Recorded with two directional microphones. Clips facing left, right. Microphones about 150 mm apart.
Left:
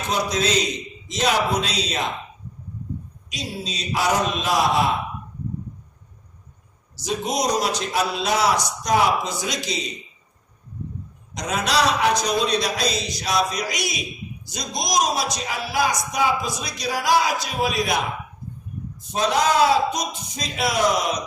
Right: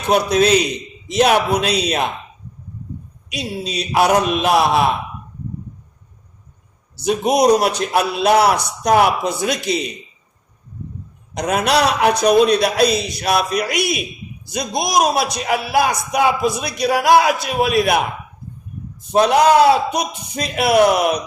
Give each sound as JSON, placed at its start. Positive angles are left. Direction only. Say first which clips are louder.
{"t": 0.1, "sound": "a man's voice", "louder": "right 9 dB", "side_deg": -60}
{"t": 3.2, "sound": "a man's voice", "louder": "right 6 dB", "side_deg": -65}
{"t": 6.9, "sound": "a man's voice", "louder": "right 8 dB", "side_deg": -60}
{"t": 11.3, "sound": "a man's voice", "louder": "right 5 dB", "side_deg": -60}
{"t": 19.1, "sound": "a man's voice", "louder": "right 8 dB", "side_deg": -60}